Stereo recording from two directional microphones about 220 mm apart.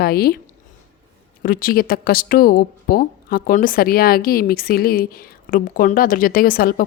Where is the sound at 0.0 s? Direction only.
45° left (ahead or behind).